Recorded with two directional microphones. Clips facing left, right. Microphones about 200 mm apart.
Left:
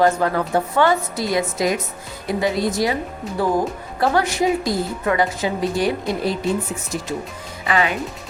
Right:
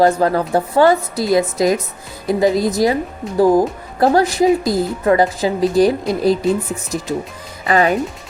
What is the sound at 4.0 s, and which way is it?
Speech, 35° right (ahead or behind).